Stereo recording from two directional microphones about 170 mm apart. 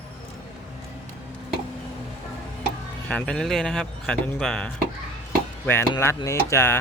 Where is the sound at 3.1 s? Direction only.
5° left (ahead or behind).